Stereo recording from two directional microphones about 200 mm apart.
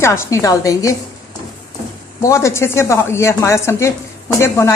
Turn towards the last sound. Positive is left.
turn(degrees=15)  # may be behind; listen again after turning